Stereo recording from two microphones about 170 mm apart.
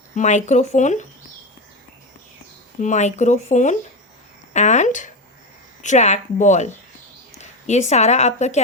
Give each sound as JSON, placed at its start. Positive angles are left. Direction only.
{"t": 0.1, "sound": "speech", "side_deg": 45}
{"t": 2.8, "sound": "speech", "side_deg": 45}
{"t": 4.5, "sound": "a sound", "side_deg": 45}
{"t": 5.8, "sound": "speech", "side_deg": 45}
{"t": 7.7, "sound": "a woman's voice", "side_deg": 40}